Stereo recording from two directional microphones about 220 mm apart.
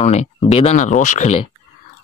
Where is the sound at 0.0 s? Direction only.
30° left (ahead or behind).